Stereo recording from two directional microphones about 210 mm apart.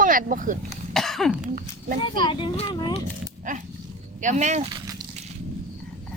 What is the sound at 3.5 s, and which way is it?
Speech, 40° right (ahead or behind).